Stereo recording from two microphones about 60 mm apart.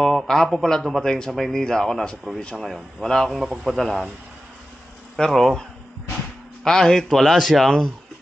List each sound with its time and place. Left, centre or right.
0.0 s a man's voice: centre
3.3 s speech: centre
5.1 s a man's voice: centre